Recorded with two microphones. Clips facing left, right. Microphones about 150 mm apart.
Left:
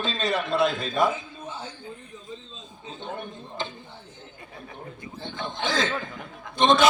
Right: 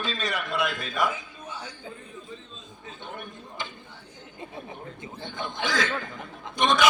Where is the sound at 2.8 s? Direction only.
25° left (ahead or behind).